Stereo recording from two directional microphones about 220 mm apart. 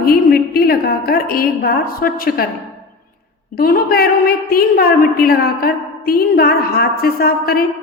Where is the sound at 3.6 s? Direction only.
40° left (ahead or behind).